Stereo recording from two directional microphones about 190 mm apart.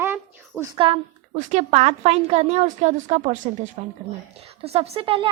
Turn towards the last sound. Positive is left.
turn(degrees=-30)  # may be behind; listen again after turning